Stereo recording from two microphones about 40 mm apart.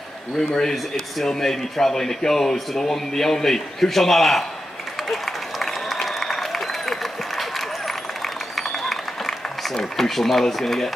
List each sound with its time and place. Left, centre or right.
0.4 s speech: centre
4.9 s applause: centre
9.8 s speech: centre